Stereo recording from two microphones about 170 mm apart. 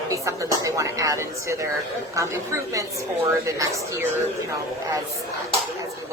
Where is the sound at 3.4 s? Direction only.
15° right (ahead or behind).